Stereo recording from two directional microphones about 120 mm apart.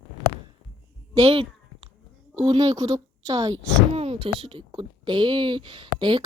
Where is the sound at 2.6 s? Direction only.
30° right (ahead or behind).